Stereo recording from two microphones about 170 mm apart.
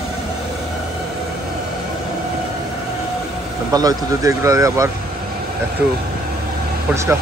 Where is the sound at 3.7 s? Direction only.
20° right (ahead or behind).